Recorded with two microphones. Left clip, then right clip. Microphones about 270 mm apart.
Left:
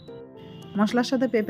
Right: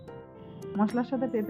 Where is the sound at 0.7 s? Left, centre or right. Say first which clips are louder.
Left 6 dB; centre.